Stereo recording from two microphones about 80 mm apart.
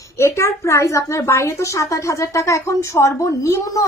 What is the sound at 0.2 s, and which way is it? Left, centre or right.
A woman's voice, left.